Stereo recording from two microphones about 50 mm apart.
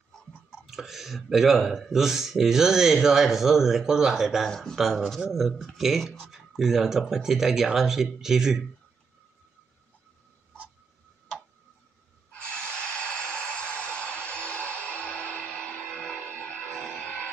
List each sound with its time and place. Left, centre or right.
0.7 s speech: centre
4.5 s speech: centre
4.7 s speech: centre
12.3 s snort: left
15.8 s music: left